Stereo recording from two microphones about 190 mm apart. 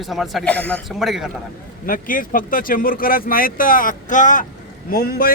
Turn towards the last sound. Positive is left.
turn(degrees=50)  # may be behind; listen again after turning